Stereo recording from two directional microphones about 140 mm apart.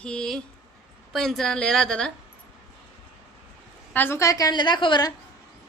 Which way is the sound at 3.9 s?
15° left (ahead or behind).